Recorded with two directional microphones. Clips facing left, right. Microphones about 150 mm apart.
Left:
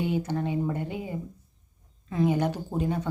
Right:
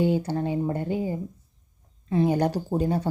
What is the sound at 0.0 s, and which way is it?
Speech, 30° right (ahead or behind).